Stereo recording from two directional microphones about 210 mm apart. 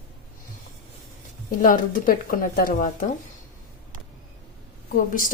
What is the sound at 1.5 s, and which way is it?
Speech, 40° left (ahead or behind).